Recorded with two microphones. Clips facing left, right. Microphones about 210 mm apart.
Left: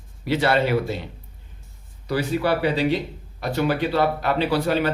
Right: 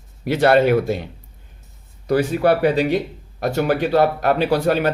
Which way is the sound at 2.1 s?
45° right (ahead or behind).